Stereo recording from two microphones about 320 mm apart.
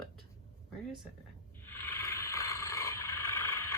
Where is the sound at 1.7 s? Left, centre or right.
Centre.